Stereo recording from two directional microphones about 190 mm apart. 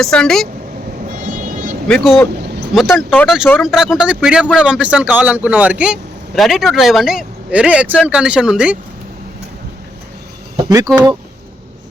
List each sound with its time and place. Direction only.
0.0 s speech: 5° left (ahead or behind)
1.1 s vehicle: 45° right (ahead or behind)
1.9 s speech: centre (ahead or behind)
10.9 s speech: 10° right (ahead or behind)